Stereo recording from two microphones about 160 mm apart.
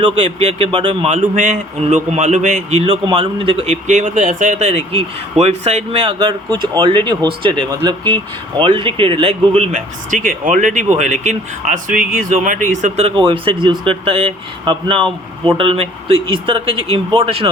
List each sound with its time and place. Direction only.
0.0 s a man's voice: 40° right (ahead or behind)
10.1 s a man's voice: 55° right (ahead or behind); by 17.5 s 35° right (ahead or behind)